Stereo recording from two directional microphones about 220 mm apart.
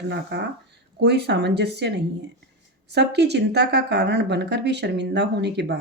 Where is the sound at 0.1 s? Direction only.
50° right (ahead or behind).